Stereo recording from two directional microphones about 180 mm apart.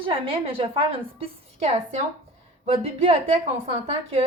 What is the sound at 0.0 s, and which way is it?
A woman's voice, 30° right (ahead or behind).